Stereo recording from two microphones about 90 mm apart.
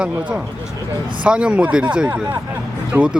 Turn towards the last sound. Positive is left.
turn(degrees=-15)  # may be behind; listen again after turning